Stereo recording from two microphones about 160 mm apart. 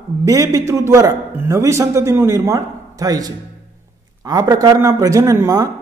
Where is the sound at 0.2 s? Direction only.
20° right (ahead or behind).